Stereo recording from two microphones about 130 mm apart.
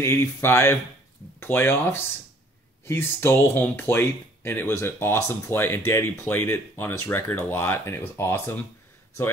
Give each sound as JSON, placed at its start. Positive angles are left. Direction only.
{"t": 0.0, "sound": "speech", "side_deg": 20}